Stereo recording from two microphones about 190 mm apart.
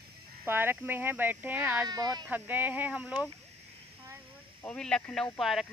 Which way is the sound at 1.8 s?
20° right (ahead or behind).